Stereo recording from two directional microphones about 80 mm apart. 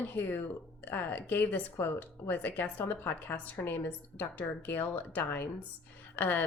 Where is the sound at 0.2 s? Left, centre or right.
Left.